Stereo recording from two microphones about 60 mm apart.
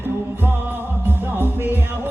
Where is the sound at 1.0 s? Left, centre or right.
Right.